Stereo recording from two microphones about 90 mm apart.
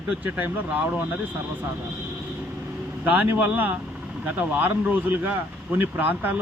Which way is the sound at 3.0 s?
20° right (ahead or behind).